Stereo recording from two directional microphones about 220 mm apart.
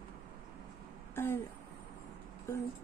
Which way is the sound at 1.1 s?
10° left (ahead or behind).